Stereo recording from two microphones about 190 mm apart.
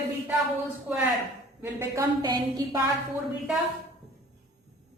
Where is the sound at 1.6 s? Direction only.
15° right (ahead or behind).